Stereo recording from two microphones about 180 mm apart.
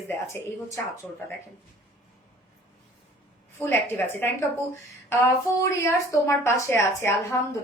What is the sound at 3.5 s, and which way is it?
Speech, 10° left (ahead or behind).